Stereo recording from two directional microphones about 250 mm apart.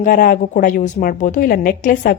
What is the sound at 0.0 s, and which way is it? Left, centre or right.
A woman's voice, left.